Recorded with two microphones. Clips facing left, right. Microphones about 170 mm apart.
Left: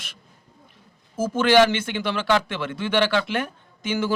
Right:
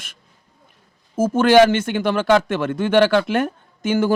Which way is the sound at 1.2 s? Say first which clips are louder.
Right 5 dB; 50° right (ahead or behind).